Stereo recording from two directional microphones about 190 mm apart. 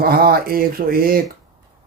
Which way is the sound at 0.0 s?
50° right (ahead or behind).